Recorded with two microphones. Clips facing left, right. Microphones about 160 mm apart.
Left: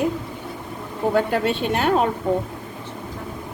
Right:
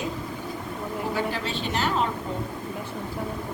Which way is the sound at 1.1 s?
60° left (ahead or behind).